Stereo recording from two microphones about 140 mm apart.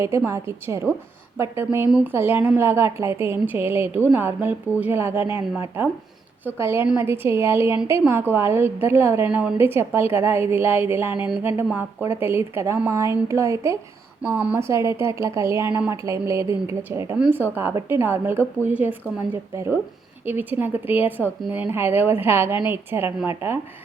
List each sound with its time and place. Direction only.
0.3 s a woman's voice: 20° right (ahead or behind)
14.2 s speech: 5° right (ahead or behind)
14.5 s a woman's voice: 20° right (ahead or behind)